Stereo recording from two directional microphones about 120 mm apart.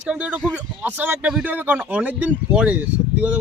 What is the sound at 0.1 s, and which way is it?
Speech, 10° right (ahead or behind).